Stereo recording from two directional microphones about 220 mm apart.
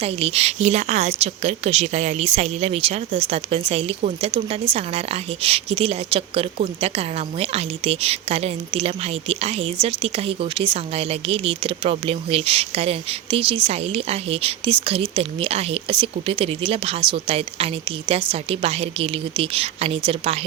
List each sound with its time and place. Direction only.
0.0 s a woman's voice: 25° right (ahead or behind)